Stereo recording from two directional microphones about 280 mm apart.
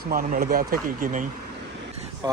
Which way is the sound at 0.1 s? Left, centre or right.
Right.